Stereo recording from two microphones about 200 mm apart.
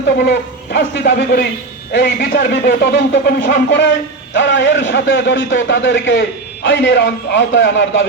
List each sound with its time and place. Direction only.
0.2 s a man's voice: 60° left (ahead or behind)